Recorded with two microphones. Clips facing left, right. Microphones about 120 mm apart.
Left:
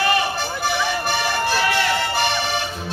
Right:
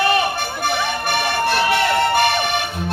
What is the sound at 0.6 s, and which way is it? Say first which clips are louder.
Music: right 1 dB; 55° right (ahead or behind).